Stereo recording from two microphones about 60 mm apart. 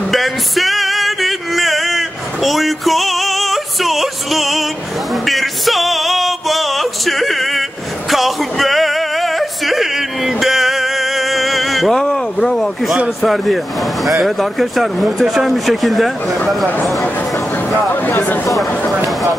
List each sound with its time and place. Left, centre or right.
0.1 s male singing: centre
8.1 s music: centre
12.0 s a sound: centre
13.2 s speech: centre
18.2 s speech: left